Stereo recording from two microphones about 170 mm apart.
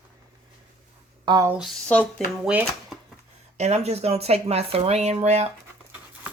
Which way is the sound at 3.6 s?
40° right (ahead or behind).